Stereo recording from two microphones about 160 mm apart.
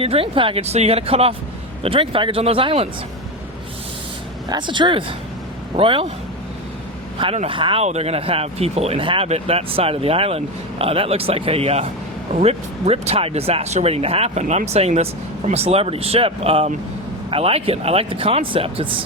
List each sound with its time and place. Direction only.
0.0 s speech: 35° right (ahead or behind)
4.4 s speech: 30° right (ahead or behind)
7.3 s speech: 35° right (ahead or behind)